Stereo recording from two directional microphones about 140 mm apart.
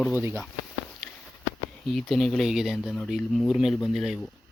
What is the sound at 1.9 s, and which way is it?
Speech, centre (ahead or behind).